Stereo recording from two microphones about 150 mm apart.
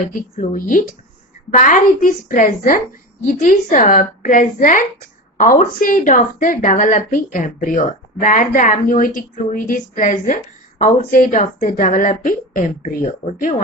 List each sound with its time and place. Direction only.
0.0 s a woman's voice: 65° left (ahead or behind)